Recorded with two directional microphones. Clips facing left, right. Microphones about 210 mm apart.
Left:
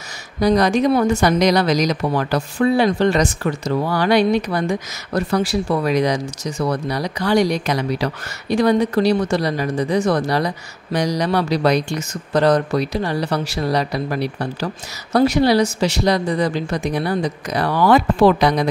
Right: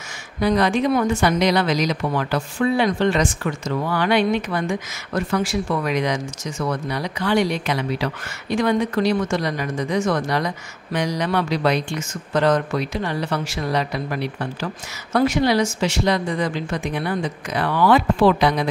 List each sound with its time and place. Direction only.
0.4 s speech: 40° left (ahead or behind)